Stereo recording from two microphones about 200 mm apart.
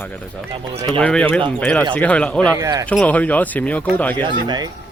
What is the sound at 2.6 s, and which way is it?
Speech, 20° right (ahead or behind).